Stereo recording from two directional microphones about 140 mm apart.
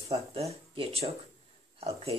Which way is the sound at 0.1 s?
45° right (ahead or behind).